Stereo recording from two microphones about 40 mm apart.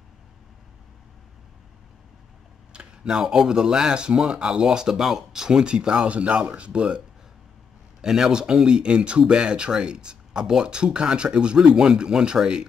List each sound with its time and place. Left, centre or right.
2.7 s speech: right
8.0 s speech: centre